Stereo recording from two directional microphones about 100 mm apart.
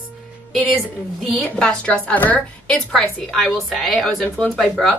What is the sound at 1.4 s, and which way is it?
A woman's voice, 10° left (ahead or behind).